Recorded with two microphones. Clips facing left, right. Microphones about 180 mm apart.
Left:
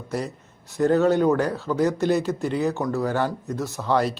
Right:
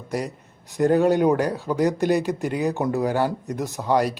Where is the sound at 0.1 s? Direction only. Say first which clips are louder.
Right 1 dB; 15° right (ahead or behind).